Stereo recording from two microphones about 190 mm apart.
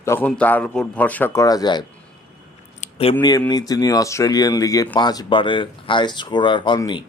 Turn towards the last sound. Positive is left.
turn(degrees=25)  # may be behind; listen again after turning